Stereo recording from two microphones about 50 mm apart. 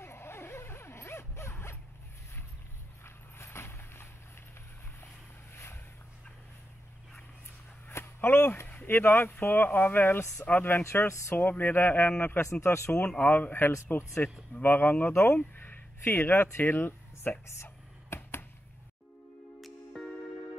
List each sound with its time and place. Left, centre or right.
0.0 s dog: left
3.3 s vehicle: left
5.5 s a sound: left
7.9 s a sound: left
8.6 s speech: left
10.8 s speech: left
11.3 s speech: left
12.4 s speech: left
13.2 s speech: left
18.1 s a sound: left
19.6 s music: centre